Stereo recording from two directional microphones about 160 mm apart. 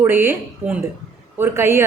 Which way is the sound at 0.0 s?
15° right (ahead or behind).